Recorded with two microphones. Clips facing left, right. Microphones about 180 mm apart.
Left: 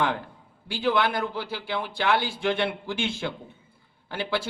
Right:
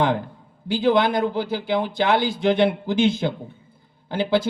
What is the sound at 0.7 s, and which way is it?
A man's voice, 40° right (ahead or behind).